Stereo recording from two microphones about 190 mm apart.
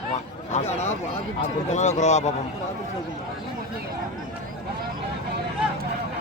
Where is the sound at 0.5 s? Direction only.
35° left (ahead or behind).